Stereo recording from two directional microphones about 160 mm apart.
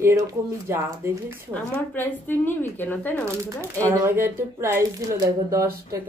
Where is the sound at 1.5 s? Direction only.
10° left (ahead or behind).